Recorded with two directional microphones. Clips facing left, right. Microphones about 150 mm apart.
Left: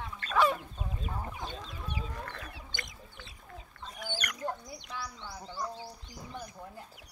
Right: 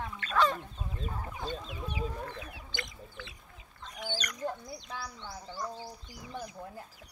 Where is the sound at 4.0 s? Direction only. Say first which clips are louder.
Right 1 dB; 55° left (ahead or behind).